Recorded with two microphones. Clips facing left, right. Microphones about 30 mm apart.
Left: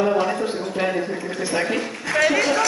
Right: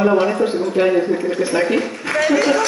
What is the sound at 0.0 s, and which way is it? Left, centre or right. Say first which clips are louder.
Speech: right 5 dB; right.